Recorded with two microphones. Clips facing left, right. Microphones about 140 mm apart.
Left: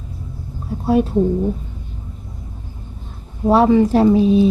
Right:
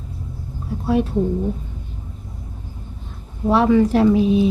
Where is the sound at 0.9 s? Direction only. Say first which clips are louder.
Left 3 dB; 35° left (ahead or behind).